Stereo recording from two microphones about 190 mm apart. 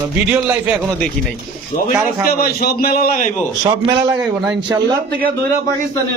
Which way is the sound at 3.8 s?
20° right (ahead or behind).